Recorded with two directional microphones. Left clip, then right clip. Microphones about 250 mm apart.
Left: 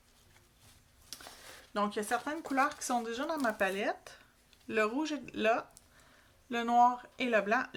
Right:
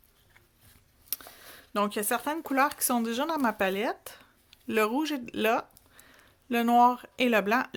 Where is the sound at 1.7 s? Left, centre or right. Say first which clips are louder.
Right 4 dB; right.